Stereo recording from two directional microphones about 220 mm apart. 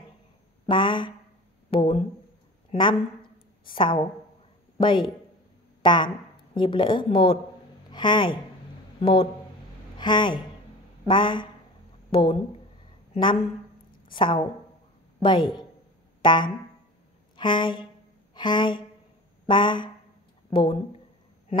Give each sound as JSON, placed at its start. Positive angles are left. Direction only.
{"t": 0.7, "sound": "a woman's voice", "side_deg": 20}
{"t": 16.2, "sound": "a sound", "side_deg": 20}
{"t": 17.4, "sound": "speech", "side_deg": 20}